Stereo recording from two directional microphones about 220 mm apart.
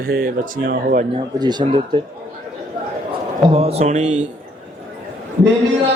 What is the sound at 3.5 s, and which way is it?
Speech, 25° right (ahead or behind).